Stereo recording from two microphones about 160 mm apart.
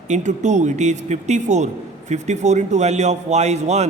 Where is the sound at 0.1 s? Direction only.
50° right (ahead or behind).